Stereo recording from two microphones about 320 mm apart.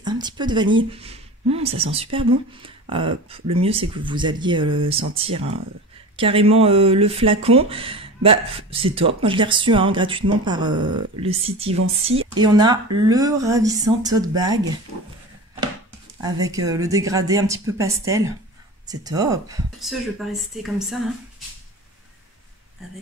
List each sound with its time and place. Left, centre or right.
0.0 s speech: centre
16.2 s speech: centre
19.8 s speech: centre